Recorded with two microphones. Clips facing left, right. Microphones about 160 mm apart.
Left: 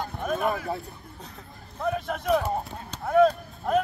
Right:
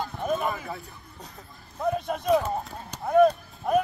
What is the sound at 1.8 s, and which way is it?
Speech, 15° right (ahead or behind).